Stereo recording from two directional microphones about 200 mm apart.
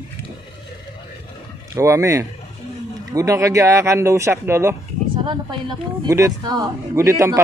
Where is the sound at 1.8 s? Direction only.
15° right (ahead or behind).